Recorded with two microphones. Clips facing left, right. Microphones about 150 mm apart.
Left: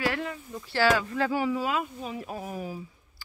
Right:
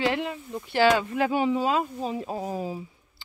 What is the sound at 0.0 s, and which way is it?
Speech, 20° right (ahead or behind).